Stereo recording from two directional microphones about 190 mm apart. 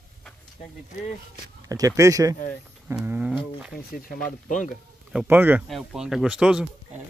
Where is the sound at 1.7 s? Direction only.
20° right (ahead or behind); by 3.8 s centre (ahead or behind).